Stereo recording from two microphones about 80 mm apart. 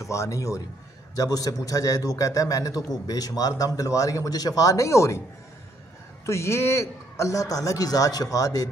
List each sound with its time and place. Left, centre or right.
0.0 s a man's voice: left
6.2 s a man's voice: left